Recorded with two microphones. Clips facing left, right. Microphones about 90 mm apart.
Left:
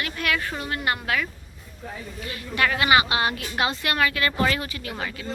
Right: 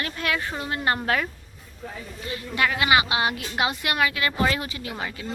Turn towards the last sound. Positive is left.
turn(degrees=-20)  # may be behind; listen again after turning